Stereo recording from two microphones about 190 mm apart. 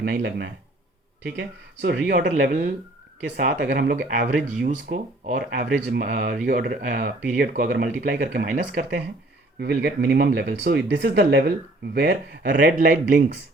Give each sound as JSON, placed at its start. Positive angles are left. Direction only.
{"t": 0.0, "sound": "speech", "side_deg": -60}
{"t": 2.3, "sound": "speech", "side_deg": -45}
{"t": 9.6, "sound": "speech", "side_deg": -60}